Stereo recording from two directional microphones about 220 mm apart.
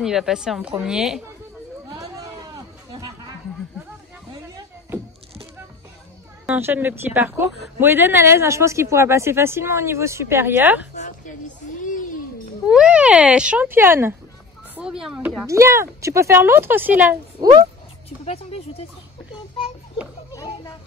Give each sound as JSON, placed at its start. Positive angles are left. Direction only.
{"t": 0.0, "sound": "a woman's voice", "side_deg": 0}
{"t": 1.9, "sound": "chatter", "side_deg": -15}
{"t": 6.4, "sound": "a woman's voice", "side_deg": -5}
{"t": 11.0, "sound": "a sound", "side_deg": 35}
{"t": 12.6, "sound": "a woman's voice", "side_deg": -5}
{"t": 15.4, "sound": "a woman's voice", "side_deg": -15}
{"t": 18.2, "sound": "speech", "side_deg": 25}
{"t": 20.3, "sound": "children playing", "side_deg": 15}